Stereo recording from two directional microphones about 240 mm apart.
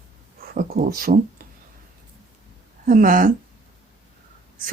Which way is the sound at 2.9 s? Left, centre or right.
Right.